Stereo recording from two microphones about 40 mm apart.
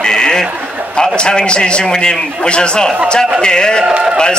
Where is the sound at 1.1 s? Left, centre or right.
Left.